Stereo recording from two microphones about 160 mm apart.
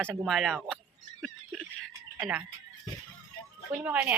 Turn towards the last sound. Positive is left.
turn(degrees=-10)  # may be behind; listen again after turning